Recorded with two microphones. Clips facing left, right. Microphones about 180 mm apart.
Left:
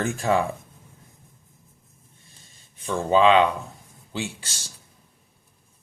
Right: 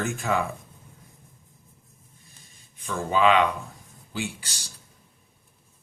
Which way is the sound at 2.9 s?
30° left (ahead or behind).